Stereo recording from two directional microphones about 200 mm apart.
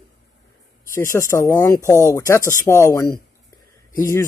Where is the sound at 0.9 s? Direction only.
15° left (ahead or behind).